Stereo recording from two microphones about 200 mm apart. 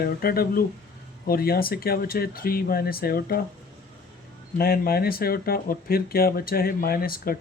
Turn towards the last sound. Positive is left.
turn(degrees=45)  # may be behind; listen again after turning